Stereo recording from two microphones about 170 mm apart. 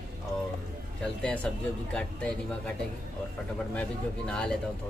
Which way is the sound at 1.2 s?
5° left (ahead or behind).